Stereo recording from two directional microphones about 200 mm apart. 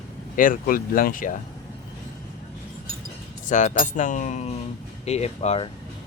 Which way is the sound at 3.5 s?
40° left (ahead or behind).